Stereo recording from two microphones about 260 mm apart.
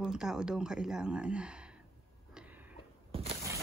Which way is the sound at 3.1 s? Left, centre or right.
Centre.